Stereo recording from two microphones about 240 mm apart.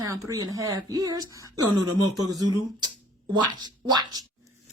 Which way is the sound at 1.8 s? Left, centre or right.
Right.